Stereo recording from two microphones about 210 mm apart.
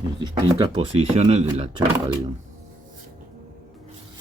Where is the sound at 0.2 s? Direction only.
20° right (ahead or behind).